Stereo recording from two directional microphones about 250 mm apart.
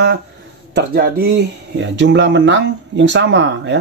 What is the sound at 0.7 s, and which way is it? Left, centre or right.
Speech, right.